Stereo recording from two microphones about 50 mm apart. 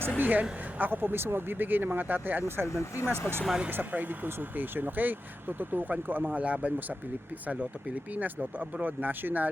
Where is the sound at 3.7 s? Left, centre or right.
Right.